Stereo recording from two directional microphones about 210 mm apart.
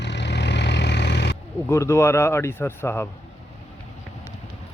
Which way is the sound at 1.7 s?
10° left (ahead or behind).